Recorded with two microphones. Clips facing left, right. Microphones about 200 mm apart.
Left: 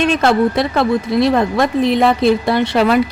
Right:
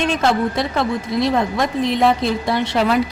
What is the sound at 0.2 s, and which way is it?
Speech, 65° left (ahead or behind).